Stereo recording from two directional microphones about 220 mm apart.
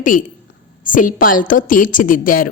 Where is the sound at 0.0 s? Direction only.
40° left (ahead or behind).